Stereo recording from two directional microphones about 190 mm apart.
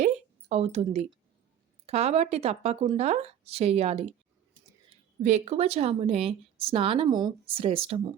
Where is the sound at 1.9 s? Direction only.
35° right (ahead or behind).